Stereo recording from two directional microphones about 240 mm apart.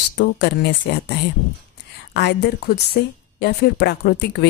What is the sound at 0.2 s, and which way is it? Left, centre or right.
A woman's voice, left.